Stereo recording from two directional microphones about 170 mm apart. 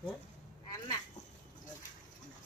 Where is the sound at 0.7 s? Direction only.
25° left (ahead or behind).